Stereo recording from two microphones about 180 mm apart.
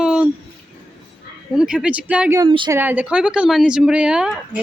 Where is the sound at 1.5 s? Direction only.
5° right (ahead or behind).